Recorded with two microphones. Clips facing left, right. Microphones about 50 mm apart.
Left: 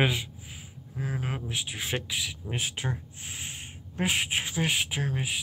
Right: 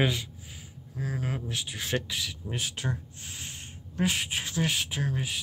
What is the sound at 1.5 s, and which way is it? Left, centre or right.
Speech, centre.